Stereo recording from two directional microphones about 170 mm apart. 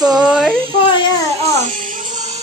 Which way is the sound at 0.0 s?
25° right (ahead or behind).